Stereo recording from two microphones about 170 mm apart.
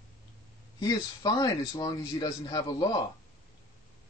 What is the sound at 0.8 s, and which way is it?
Speech, 20° left (ahead or behind).